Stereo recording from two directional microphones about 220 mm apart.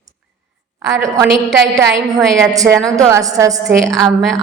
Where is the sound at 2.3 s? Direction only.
15° right (ahead or behind).